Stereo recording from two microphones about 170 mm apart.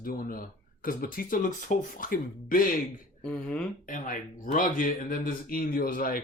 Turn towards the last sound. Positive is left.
turn(degrees=55)  # may be behind; listen again after turning